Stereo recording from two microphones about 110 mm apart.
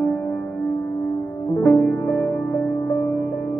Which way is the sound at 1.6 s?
15° left (ahead or behind).